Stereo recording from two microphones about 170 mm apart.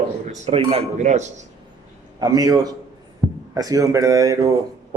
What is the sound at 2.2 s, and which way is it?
Speech, 20° right (ahead or behind).